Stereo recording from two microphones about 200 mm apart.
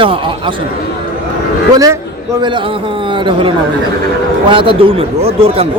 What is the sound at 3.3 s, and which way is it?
A man's voice, 25° right (ahead or behind).